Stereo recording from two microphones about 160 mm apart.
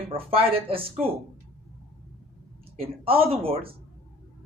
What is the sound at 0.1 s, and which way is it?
Speech, 35° right (ahead or behind).